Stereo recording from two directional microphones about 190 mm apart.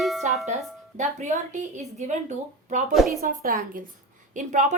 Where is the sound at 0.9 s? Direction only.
40° right (ahead or behind).